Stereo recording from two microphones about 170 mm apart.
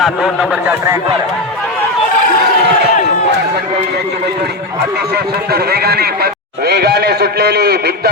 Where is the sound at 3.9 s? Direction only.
75° right (ahead or behind).